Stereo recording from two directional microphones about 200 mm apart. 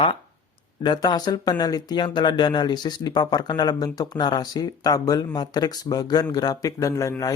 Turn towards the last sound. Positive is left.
turn(degrees=15)  # may be behind; listen again after turning